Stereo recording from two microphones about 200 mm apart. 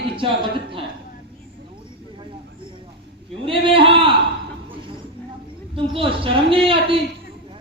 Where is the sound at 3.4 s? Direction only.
25° right (ahead or behind).